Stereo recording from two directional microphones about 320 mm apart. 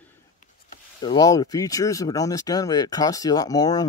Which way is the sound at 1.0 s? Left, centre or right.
Centre.